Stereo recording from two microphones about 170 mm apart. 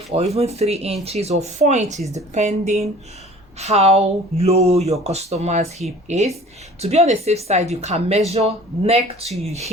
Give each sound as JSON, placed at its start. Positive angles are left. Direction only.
{"t": 0.3, "sound": "speech", "side_deg": -40}